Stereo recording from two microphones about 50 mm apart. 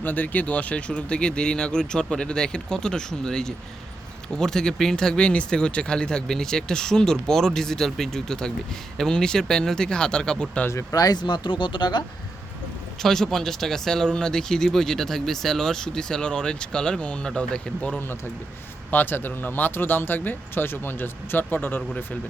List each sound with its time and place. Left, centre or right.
0.0 s speech: left; by 10.6 s centre
13.0 s speech: centre; by 18.0 s left
18.9 s speech: left